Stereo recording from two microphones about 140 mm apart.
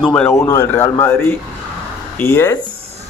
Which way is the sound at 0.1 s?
15° left (ahead or behind).